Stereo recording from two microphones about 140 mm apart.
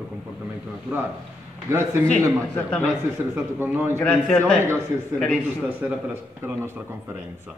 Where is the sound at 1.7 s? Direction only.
20° right (ahead or behind).